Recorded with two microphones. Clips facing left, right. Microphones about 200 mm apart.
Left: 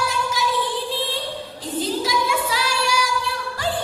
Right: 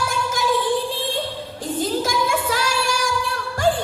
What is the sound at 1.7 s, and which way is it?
Child singing, 50° right (ahead or behind).